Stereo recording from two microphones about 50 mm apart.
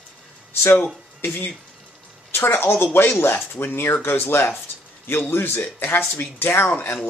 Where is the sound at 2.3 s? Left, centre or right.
Left.